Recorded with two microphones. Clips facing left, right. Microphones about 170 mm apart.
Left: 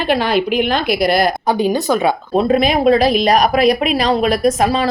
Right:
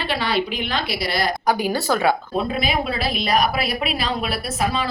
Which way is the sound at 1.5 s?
20° left (ahead or behind).